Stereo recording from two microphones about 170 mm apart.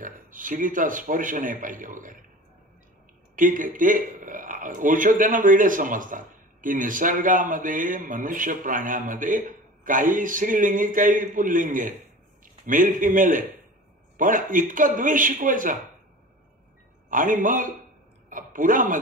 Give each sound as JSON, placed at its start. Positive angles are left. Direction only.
{"t": 0.0, "sound": "a man's voice", "side_deg": -50}
{"t": 3.3, "sound": "a man's voice", "side_deg": -50}
{"t": 17.1, "sound": "a man's voice", "side_deg": -50}